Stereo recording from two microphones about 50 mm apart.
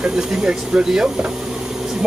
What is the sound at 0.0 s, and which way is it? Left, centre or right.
Speech, right.